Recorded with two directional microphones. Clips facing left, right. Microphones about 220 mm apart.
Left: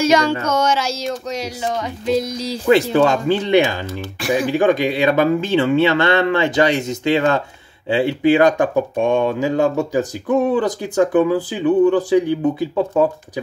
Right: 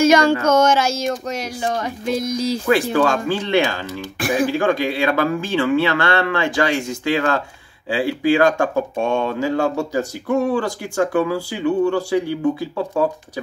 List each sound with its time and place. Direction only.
0.0 s speech: 50° right (ahead or behind)
2.6 s speech: 20° left (ahead or behind)